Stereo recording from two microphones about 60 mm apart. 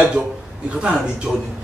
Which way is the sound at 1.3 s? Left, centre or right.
Centre.